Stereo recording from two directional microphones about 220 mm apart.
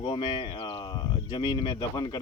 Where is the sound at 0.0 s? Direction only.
20° left (ahead or behind).